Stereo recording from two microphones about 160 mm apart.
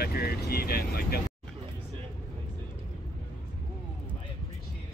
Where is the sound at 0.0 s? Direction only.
70° left (ahead or behind).